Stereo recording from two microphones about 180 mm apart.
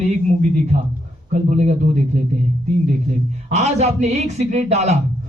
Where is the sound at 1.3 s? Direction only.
40° right (ahead or behind).